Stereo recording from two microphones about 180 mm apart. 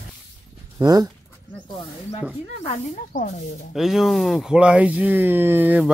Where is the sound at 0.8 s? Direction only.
20° right (ahead or behind).